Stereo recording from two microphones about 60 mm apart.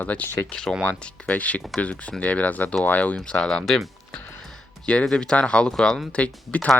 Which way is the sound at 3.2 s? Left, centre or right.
Centre.